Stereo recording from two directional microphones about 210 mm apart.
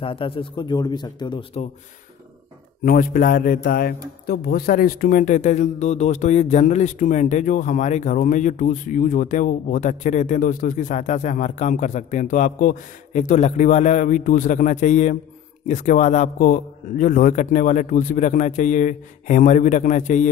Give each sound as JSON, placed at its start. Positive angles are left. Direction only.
{"t": 0.0, "sound": "a man's voice", "side_deg": 25}
{"t": 2.8, "sound": "a man's voice", "side_deg": 45}